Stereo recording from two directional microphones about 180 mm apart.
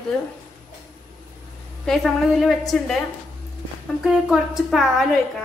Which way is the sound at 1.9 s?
Centre (ahead or behind).